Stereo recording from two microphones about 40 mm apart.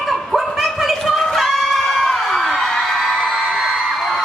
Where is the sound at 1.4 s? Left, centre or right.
Centre.